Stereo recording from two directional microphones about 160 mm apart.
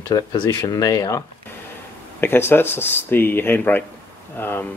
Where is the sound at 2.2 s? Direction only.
15° left (ahead or behind).